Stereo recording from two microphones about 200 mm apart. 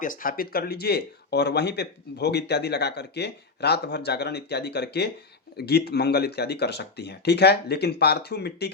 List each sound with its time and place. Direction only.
0.0 s speech: 45° left (ahead or behind)